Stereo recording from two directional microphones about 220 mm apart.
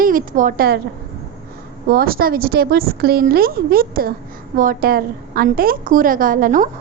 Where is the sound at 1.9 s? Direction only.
40° right (ahead or behind).